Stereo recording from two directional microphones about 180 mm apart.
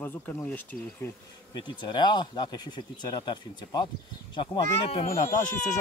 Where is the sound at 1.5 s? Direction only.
25° left (ahead or behind).